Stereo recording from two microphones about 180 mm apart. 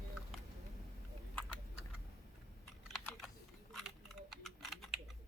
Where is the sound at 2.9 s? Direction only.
Centre (ahead or behind).